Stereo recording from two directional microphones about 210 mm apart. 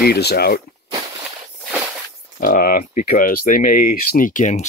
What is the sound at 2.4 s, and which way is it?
Speech, 45° left (ahead or behind).